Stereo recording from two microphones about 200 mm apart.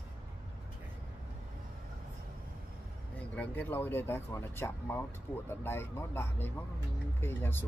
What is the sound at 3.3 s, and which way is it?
Speech, 10° left (ahead or behind).